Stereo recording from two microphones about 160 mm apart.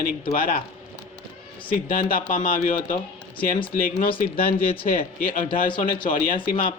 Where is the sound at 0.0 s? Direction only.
60° left (ahead or behind).